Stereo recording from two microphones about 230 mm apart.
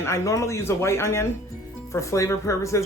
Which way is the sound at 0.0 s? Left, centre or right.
Centre.